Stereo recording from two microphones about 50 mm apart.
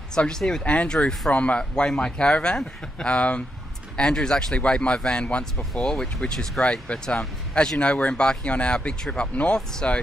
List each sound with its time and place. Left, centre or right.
0.1 s speech: centre
0.7 s speech: left
9.8 s speech: left